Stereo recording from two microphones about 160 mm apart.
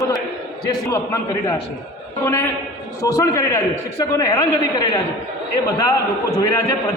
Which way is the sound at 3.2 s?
20° left (ahead or behind).